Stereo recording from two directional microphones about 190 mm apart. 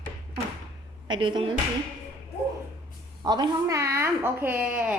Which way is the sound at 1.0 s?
25° right (ahead or behind).